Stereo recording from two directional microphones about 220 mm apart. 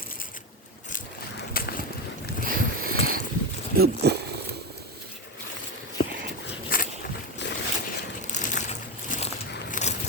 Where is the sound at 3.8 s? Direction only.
50° right (ahead or behind).